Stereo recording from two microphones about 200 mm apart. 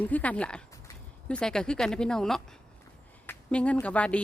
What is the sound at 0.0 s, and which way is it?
Speech, 5° left (ahead or behind).